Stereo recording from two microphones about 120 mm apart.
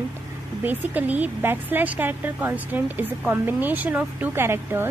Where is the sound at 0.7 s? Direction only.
15° right (ahead or behind).